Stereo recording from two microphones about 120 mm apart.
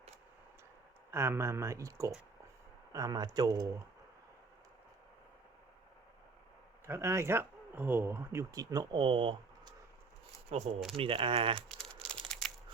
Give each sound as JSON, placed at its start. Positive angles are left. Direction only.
{"t": 1.1, "sound": "speech", "side_deg": -20}
{"t": 6.8, "sound": "speech", "side_deg": -20}
{"t": 10.5, "sound": "speech", "side_deg": -60}
{"t": 10.9, "sound": "speech", "side_deg": -50}
{"t": 11.7, "sound": "crumpling", "side_deg": 5}